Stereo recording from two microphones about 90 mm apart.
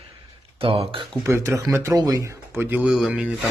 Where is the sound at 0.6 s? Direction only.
90° right.